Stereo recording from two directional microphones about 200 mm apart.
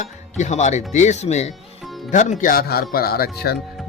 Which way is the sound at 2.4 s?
45° left (ahead or behind).